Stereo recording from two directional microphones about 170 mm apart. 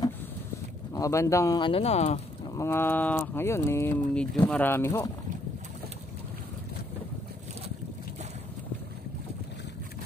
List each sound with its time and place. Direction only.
0.9 s speech: 20° left (ahead or behind); by 2.2 s 40° left (ahead or behind)
2.5 s speech: 15° left (ahead or behind)